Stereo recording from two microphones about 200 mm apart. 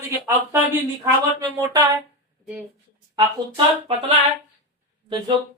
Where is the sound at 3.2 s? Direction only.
25° right (ahead or behind).